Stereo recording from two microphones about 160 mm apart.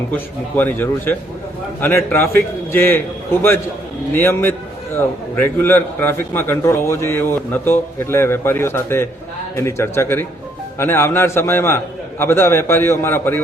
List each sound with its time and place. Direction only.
0.1 s a man's voice: 10° left (ahead or behind)
4.1 s a man's voice: 15° left (ahead or behind)